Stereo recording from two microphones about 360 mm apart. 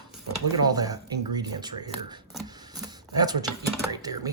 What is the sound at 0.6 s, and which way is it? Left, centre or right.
Speech, centre.